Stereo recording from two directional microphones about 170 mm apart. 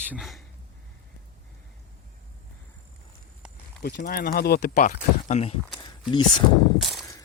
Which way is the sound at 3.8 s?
65° left (ahead or behind).